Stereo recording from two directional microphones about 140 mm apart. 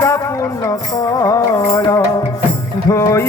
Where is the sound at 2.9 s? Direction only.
20° left (ahead or behind).